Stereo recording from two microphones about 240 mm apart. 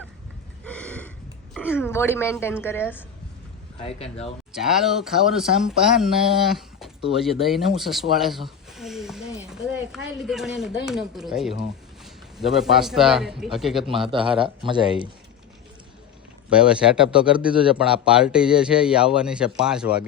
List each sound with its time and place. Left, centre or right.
0.6 s a sound: centre
1.5 s a woman's voice: centre
3.8 s speech: left
4.5 s a man's voice: centre
14.6 s speech: centre
16.5 s a man's voice: centre